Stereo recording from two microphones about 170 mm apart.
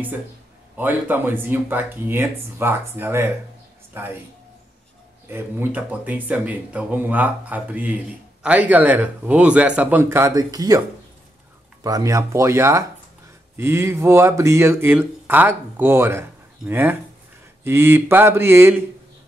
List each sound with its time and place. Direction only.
0.7 s speech: 10° right (ahead or behind)
5.3 s speech: 10° right (ahead or behind)
11.8 s speech: 20° right (ahead or behind)